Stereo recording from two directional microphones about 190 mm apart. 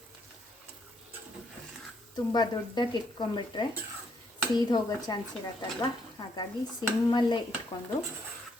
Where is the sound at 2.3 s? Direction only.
20° left (ahead or behind).